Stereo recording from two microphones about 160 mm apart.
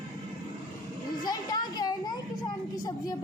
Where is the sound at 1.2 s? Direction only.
25° left (ahead or behind).